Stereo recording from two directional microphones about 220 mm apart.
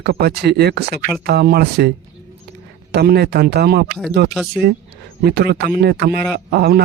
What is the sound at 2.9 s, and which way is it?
Speech, 45° right (ahead or behind).